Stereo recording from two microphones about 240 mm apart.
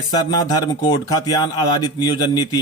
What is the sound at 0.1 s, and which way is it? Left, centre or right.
Speech, centre.